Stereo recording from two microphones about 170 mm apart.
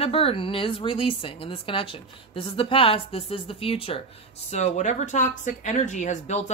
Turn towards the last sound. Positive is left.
turn(degrees=40)  # may be behind; listen again after turning